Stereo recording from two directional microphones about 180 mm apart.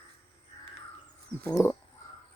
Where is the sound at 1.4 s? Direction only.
15° left (ahead or behind).